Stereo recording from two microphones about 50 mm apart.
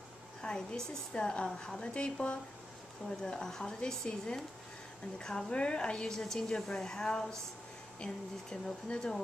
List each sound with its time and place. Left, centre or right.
0.4 s a woman's voice: centre